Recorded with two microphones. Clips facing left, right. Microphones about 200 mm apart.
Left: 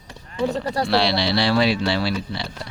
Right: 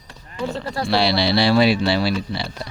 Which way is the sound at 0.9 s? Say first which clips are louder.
Right 3 dB; 5° right (ahead or behind).